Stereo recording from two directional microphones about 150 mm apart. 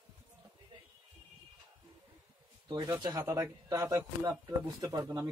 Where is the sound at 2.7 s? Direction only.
30° right (ahead or behind).